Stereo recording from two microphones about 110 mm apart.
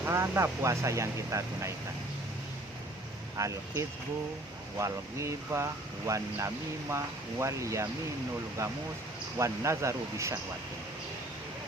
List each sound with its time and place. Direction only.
0.0 s speech: 25° right (ahead or behind)
3.3 s speech: 30° right (ahead or behind)
9.4 s speech: 25° right (ahead or behind)